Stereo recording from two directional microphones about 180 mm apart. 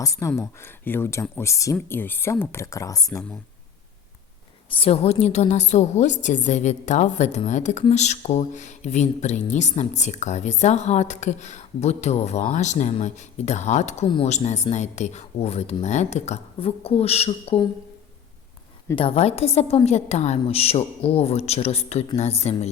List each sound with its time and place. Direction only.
0.0 s speech: 15° left (ahead or behind)
4.7 s a woman's voice: 30° left (ahead or behind)
18.9 s a woman's voice: 35° left (ahead or behind)